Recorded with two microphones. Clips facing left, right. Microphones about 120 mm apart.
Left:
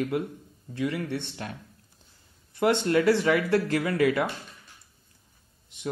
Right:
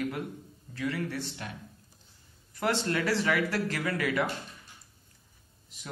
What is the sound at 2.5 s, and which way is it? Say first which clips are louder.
A man's voice: left 6 dB; 25° left (ahead or behind).